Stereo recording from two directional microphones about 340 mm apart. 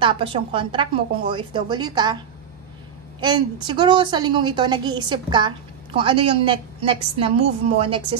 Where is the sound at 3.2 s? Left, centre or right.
Centre.